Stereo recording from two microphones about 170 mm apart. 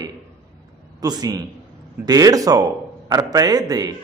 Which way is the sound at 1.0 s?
20° right (ahead or behind).